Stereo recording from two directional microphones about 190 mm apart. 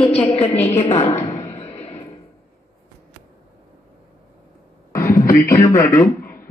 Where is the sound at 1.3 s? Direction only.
15° left (ahead or behind).